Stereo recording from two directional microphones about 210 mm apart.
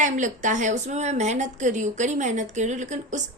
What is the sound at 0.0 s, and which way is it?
A woman's voice, 35° right (ahead or behind).